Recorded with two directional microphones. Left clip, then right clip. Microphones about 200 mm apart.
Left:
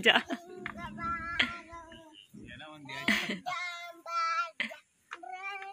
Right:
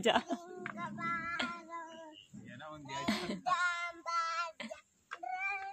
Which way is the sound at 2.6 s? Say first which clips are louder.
Even; 25° right (ahead or behind).